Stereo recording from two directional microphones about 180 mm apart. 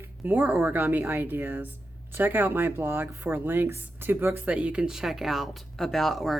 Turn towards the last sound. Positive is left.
turn(degrees=0)  # may be behind; listen again after turning